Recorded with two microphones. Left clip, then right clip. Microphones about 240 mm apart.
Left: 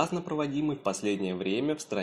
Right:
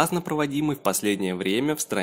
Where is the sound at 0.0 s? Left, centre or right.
Right.